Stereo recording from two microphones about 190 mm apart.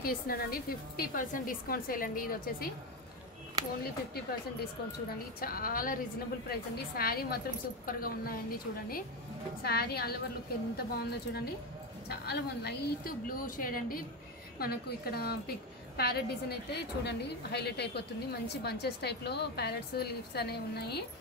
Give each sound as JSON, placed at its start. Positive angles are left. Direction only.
{"t": 0.0, "sound": "a woman's voice", "side_deg": 50}
{"t": 3.8, "sound": "a woman's voice", "side_deg": 55}